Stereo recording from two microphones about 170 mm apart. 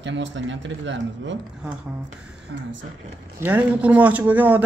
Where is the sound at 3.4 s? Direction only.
10° right (ahead or behind).